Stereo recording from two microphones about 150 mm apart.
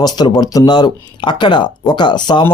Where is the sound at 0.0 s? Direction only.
25° left (ahead or behind).